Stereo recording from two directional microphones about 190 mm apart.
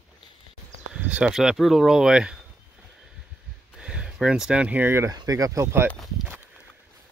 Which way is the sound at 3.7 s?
5° right (ahead or behind).